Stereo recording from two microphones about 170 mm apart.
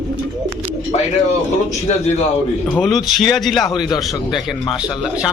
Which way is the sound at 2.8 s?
Centre (ahead or behind).